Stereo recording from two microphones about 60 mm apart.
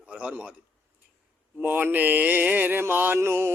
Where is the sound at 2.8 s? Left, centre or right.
Right.